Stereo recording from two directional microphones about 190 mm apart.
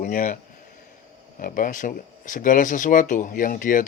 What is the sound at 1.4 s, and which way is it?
Speech, 45° left (ahead or behind).